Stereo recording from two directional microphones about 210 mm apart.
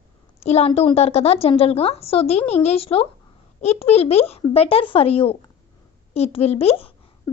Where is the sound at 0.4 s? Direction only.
30° left (ahead or behind).